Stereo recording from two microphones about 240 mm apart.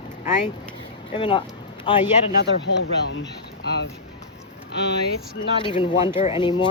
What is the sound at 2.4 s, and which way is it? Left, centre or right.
Speech, left.